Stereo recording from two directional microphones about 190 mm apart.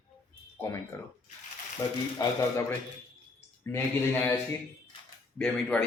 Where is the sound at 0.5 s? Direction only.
15° left (ahead or behind).